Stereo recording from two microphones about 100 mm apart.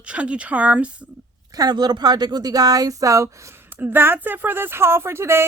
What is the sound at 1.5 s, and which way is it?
Speech, 40° right (ahead or behind).